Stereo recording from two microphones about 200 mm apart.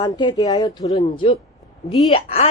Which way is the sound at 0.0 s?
20° left (ahead or behind).